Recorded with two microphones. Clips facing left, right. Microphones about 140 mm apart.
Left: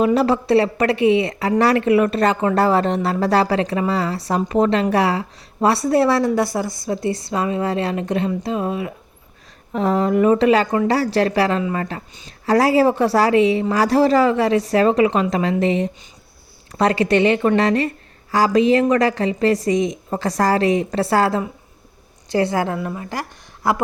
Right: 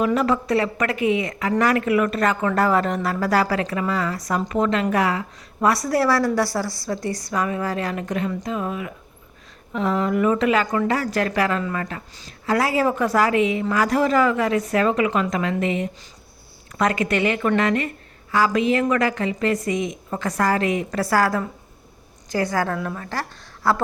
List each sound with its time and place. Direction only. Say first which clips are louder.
0.0 s a woman's voice: left 4 dB; 30° left (ahead or behind)
22.8 s speech: left 2 dB; 10° left (ahead or behind)